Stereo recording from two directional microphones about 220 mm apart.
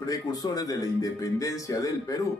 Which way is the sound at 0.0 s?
15° left (ahead or behind).